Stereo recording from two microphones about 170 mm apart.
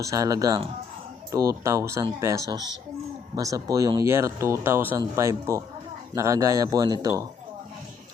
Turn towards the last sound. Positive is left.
turn(degrees=-20)  # may be behind; listen again after turning